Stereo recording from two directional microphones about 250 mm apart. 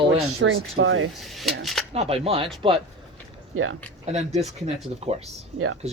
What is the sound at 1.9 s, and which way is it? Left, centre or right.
Speech, right.